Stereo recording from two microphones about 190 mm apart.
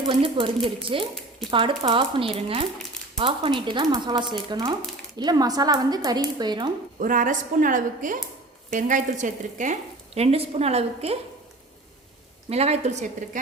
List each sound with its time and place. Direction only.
0.1 s speech: 25° right (ahead or behind)
7.0 s a woman's voice: 45° right (ahead or behind)
12.5 s speech: 35° right (ahead or behind)